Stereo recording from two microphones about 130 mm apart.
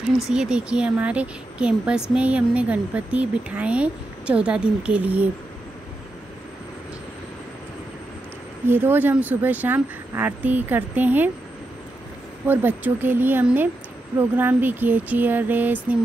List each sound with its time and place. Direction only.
0.3 s speech: 5° right (ahead or behind)
8.6 s speech: 15° right (ahead or behind)
12.4 s speech: 15° right (ahead or behind)